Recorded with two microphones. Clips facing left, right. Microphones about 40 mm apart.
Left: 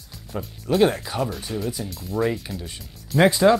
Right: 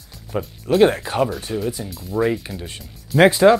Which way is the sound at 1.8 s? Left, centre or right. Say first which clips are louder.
Right 3 dB; centre.